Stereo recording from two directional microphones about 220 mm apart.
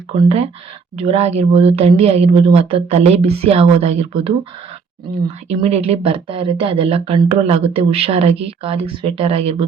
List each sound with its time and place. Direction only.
0.9 s speech: 30° right (ahead or behind)
5.5 s speech: 30° right (ahead or behind)